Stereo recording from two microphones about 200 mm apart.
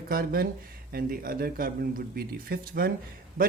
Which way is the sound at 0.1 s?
50° right (ahead or behind).